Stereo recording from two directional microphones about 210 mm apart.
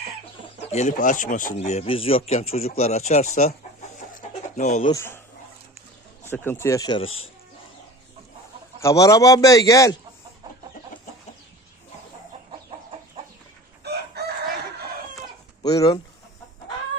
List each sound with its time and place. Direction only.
0.6 s speech: 30° left (ahead or behind)
4.9 s a man's voice: 10° left (ahead or behind)
6.2 s a man's voice: 10° left (ahead or behind)
7.0 s speech: 75° left (ahead or behind)
8.8 s a man's voice: 15° left (ahead or behind)
13.8 s chicken: 50° right (ahead or behind)
15.6 s a man's voice: 15° left (ahead or behind)